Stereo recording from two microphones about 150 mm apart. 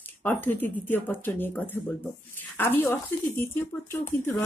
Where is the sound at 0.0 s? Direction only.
15° left (ahead or behind).